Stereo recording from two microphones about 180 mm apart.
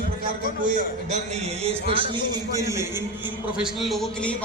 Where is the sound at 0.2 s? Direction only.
45° right (ahead or behind).